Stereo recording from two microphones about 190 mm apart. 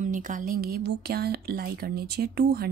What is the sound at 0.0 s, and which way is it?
Speech, 45° right (ahead or behind).